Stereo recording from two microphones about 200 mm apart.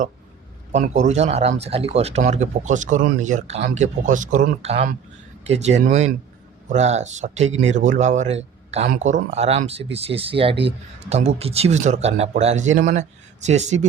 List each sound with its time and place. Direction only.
0.7 s speech: 35° right (ahead or behind)